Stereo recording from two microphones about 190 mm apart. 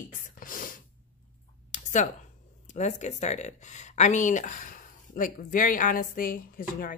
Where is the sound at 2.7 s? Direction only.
35° left (ahead or behind).